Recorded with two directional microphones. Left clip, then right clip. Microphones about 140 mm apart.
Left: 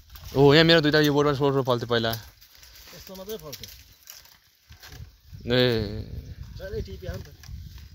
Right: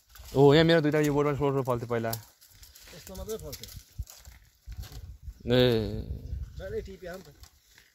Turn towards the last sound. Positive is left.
turn(degrees=5)  # may be behind; listen again after turning